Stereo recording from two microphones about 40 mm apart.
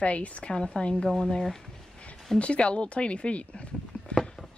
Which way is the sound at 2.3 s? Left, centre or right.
Left.